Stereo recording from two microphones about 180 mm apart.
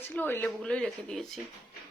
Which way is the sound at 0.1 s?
10° left (ahead or behind).